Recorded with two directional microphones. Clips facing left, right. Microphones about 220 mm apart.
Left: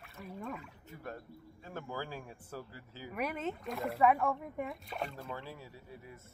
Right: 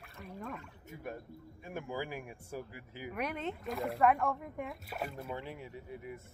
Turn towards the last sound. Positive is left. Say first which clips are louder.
# right 6 dB
turn(degrees=-20)  # may be behind; listen again after turning